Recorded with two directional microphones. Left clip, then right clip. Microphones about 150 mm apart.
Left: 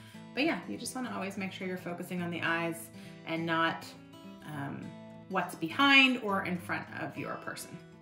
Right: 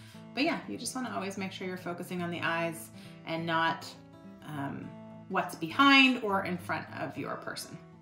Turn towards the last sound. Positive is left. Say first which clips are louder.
# right 1 dB
turn(degrees=-20)  # may be behind; listen again after turning